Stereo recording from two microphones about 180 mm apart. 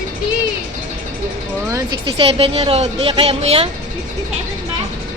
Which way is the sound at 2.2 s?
30° right (ahead or behind).